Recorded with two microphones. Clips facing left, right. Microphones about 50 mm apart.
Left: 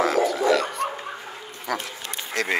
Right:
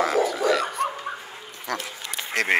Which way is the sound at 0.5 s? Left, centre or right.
Centre.